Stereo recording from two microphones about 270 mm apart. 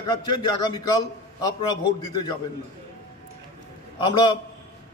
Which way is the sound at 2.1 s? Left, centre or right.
Centre.